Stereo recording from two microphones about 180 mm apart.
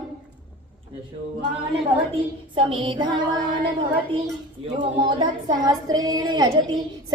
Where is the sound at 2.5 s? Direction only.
30° right (ahead or behind).